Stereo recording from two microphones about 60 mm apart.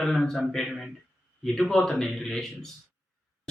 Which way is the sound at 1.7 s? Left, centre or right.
Centre.